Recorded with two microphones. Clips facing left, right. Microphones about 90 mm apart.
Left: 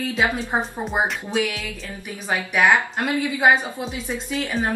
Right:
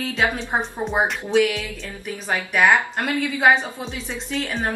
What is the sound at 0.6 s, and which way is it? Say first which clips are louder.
A woman's voice: right 2 dB; centre (ahead or behind).